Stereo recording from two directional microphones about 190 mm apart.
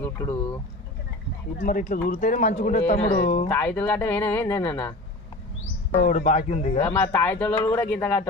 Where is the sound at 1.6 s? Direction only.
45° left (ahead or behind).